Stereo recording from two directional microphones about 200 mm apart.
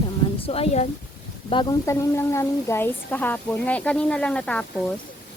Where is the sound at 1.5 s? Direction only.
20° left (ahead or behind); by 4.8 s 5° left (ahead or behind).